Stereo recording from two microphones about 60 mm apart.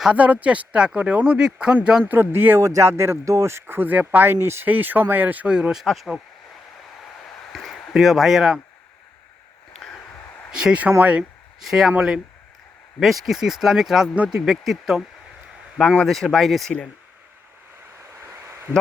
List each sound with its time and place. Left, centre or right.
0.1 s speech: right
2.0 s speech: right
2.6 s speech: right
4.6 s speech: right
5.5 s speech: centre
5.8 s speech: centre
7.5 s speech: centre
10.5 s speech: centre
13.0 s speech: centre
16.0 s speech: centre
18.2 s a sound: right